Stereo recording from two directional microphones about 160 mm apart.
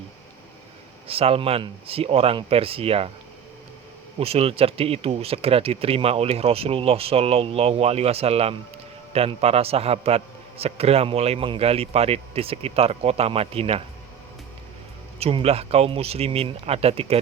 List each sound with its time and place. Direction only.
1.0 s a man's voice: 35° right (ahead or behind)
4.2 s a man's voice: 40° right (ahead or behind)
15.2 s a man's voice: 40° right (ahead or behind)